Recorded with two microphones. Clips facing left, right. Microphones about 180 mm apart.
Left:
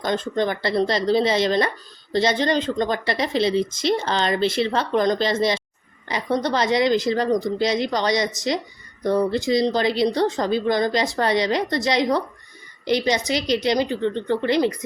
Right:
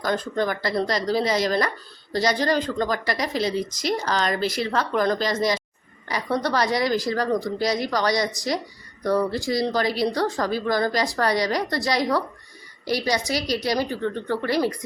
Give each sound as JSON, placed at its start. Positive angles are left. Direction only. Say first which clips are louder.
{"t": 0.0, "sound": "a woman's voice", "louder": "left 2 dB", "side_deg": 25}